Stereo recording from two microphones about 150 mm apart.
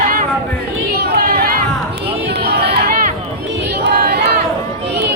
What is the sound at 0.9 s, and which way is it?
Chatter, 90° right.